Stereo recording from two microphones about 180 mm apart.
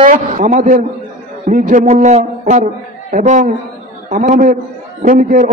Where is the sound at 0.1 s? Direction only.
45° right (ahead or behind).